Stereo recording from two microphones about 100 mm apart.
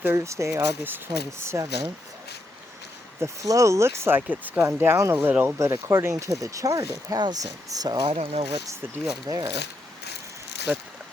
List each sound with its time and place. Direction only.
0.0 s speech: 25° right (ahead or behind)
3.2 s speech: 30° right (ahead or behind)
5.5 s speech: 30° right (ahead or behind); by 8.1 s 45° right (ahead or behind)
8.1 s speech: 90° right
9.2 s speech: 40° right (ahead or behind)
10.7 s speech: 10° right (ahead or behind)